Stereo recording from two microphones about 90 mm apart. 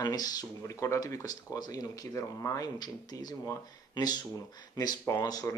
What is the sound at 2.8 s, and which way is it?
Speech, 50° left (ahead or behind).